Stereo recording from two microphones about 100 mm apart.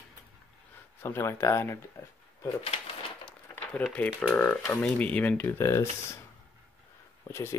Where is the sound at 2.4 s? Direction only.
70° left (ahead or behind).